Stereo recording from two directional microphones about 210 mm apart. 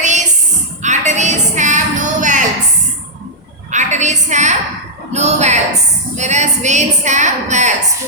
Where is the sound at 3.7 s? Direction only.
35° right (ahead or behind).